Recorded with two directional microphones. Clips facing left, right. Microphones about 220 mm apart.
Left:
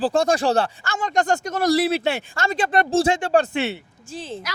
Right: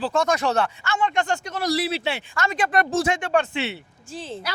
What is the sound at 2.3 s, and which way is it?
Speech, 30° left (ahead or behind).